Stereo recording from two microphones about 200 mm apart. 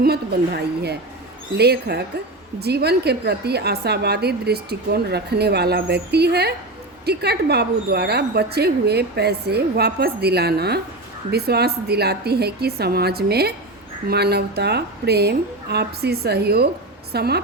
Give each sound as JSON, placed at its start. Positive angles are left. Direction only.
{"t": 0.0, "sound": "a woman's voice", "side_deg": -55}